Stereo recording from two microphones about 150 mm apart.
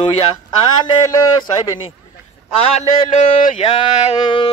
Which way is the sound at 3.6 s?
40° left (ahead or behind).